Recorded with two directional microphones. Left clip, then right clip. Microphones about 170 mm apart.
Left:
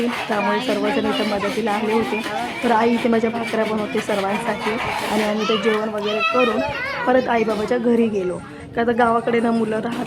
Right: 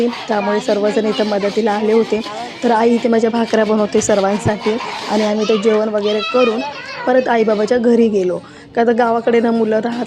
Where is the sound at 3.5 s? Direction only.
35° right (ahead or behind).